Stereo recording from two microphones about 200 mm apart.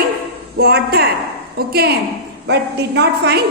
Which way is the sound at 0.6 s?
55° right (ahead or behind).